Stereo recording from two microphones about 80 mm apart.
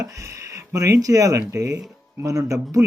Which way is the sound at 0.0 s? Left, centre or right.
Right.